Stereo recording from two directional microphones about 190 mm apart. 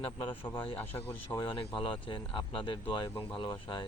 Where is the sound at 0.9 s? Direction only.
10° left (ahead or behind).